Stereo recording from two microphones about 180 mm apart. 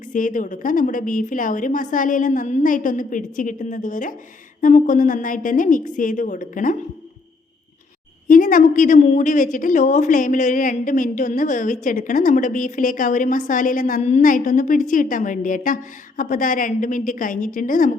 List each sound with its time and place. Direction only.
0.1 s a woman's voice: 45° left (ahead or behind)
8.3 s a woman's voice: 50° left (ahead or behind)